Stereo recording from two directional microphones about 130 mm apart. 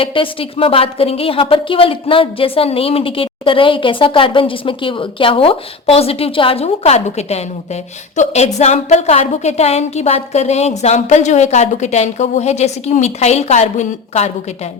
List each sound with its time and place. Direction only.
0.0 s a woman's voice: 45° left (ahead or behind); by 14.3 s 60° left (ahead or behind)